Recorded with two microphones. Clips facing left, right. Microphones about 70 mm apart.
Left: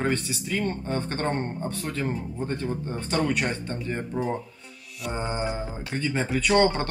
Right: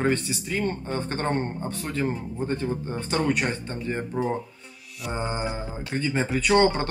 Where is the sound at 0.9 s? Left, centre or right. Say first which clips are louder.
Even; centre.